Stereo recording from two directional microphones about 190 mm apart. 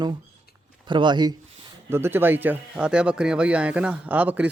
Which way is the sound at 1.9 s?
10° right (ahead or behind).